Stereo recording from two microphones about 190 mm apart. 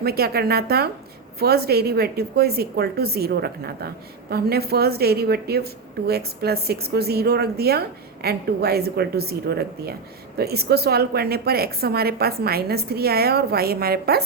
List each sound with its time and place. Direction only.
0.0 s a woman's voice: 55° right (ahead or behind)